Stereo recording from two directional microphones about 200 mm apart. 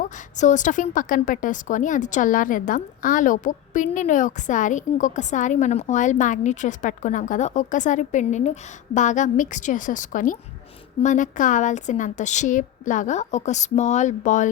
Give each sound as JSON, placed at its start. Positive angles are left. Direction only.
{"t": 0.3, "sound": "a woman's voice", "side_deg": 40}